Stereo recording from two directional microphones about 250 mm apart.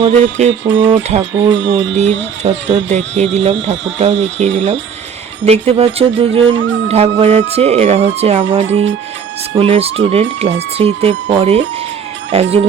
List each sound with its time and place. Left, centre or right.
0.0 s speech: right
6.4 s music: right
6.8 s speech: right